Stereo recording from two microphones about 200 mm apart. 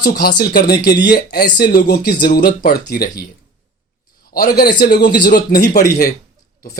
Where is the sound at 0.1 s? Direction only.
50° left (ahead or behind).